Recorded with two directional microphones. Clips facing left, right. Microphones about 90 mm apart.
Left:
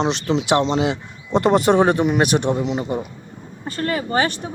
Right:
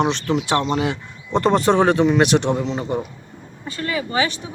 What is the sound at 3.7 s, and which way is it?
Speech, 45° left (ahead or behind).